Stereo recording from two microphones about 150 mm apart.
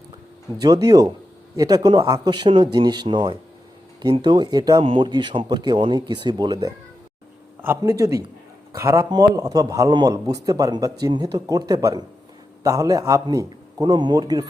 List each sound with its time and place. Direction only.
0.6 s speech: 25° right (ahead or behind)